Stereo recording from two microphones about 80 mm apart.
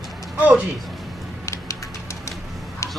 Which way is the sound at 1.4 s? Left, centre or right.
Left.